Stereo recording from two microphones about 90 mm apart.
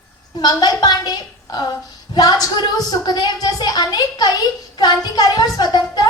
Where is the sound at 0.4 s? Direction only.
45° left (ahead or behind).